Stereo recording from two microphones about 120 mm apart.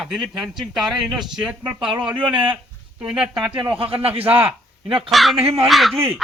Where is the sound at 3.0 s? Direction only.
5° right (ahead or behind).